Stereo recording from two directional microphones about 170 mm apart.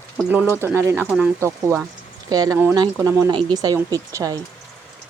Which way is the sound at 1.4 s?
15° right (ahead or behind).